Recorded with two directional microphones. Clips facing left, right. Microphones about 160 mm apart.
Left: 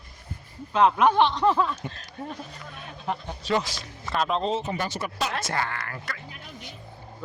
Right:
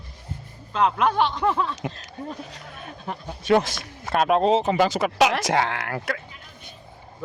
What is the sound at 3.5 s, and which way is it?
Speech, 55° right (ahead or behind).